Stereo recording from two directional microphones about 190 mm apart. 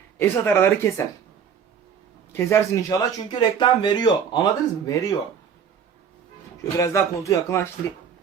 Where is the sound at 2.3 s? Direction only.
15° left (ahead or behind).